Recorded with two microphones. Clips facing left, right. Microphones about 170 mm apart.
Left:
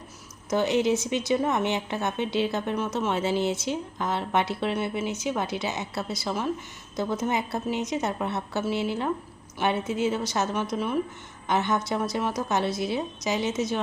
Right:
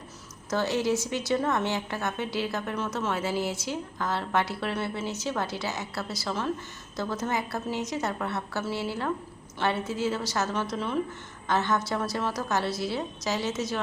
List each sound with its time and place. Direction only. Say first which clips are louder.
0.5 s a woman's voice: left 3 dB; 20° left (ahead or behind)